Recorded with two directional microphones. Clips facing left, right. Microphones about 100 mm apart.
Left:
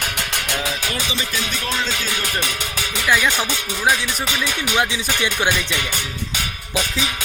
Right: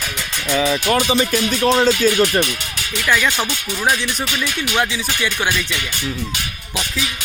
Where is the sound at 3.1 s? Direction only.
10° left (ahead or behind).